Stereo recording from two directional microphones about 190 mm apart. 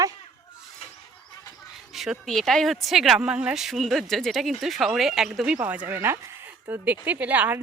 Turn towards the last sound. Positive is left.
turn(degrees=-10)  # may be behind; listen again after turning